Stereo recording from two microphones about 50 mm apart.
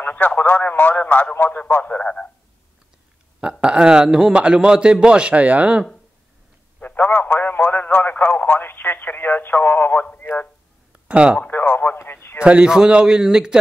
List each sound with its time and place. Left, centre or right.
0.0 s radio: left
0.4 s speech: left
3.6 s a man's voice: centre
6.8 s radio: left
7.1 s speech: left
10.9 s a sound: right
11.4 s radio: left
12.4 s a man's voice: right
12.6 s a man's voice: centre